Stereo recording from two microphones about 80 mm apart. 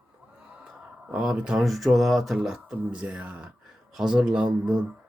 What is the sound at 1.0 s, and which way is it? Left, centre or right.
Speech, centre.